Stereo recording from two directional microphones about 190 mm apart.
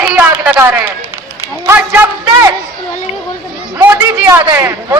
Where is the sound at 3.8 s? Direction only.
10° right (ahead or behind).